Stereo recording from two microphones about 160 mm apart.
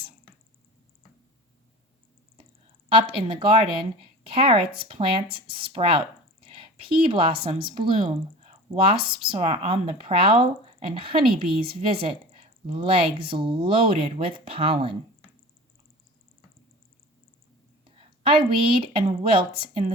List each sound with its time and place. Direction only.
2.9 s speech: 35° right (ahead or behind)
18.2 s speech: 35° right (ahead or behind)